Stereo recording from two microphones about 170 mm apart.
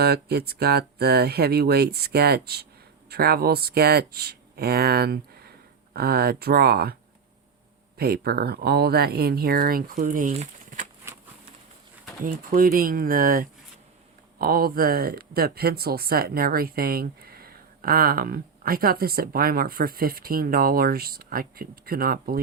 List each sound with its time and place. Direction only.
0.0 s speech: 70° right (ahead or behind)
7.9 s speech: 65° right (ahead or behind); by 10.8 s 45° right (ahead or behind)
12.2 s speech: 55° right (ahead or behind)